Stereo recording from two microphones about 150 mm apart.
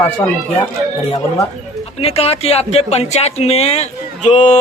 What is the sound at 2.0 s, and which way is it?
A man's voice, 40° left (ahead or behind).